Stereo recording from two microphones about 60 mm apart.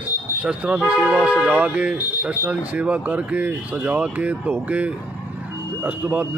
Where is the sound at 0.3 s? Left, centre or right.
Right.